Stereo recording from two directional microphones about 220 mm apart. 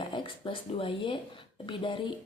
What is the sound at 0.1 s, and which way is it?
Speech, 20° left (ahead or behind).